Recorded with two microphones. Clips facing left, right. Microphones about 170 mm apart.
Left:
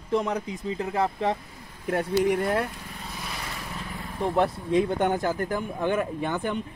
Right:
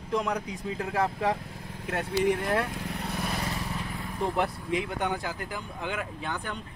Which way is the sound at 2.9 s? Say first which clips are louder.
Right 5 dB; 70° right (ahead or behind).